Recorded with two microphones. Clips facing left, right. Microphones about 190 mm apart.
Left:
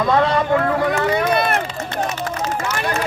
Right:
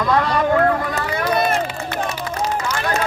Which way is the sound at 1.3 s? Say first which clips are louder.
Even; 65° left (ahead or behind).